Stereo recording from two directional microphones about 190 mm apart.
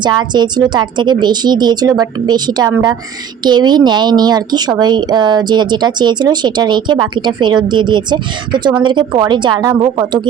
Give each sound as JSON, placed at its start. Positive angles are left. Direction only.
{"t": 0.0, "sound": "speech", "side_deg": -25}